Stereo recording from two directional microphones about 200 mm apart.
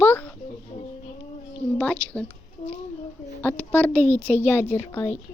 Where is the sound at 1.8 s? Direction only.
5° left (ahead or behind).